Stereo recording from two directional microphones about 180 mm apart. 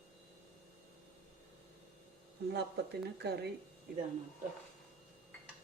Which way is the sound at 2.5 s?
65° right (ahead or behind).